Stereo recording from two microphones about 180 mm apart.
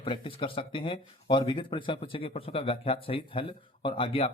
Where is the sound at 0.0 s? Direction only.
30° left (ahead or behind).